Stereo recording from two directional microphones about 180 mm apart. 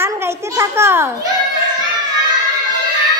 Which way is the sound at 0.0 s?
15° right (ahead or behind).